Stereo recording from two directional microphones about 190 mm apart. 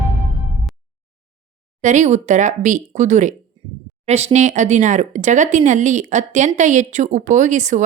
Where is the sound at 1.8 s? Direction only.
40° right (ahead or behind).